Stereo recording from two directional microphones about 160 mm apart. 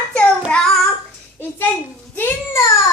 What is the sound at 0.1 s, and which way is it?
Child singing, 5° left (ahead or behind).